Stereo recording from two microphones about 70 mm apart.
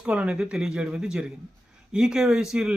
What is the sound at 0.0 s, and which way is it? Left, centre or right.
Speech, centre.